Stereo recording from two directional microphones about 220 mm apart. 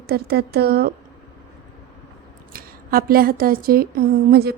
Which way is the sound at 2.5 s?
40° right (ahead or behind).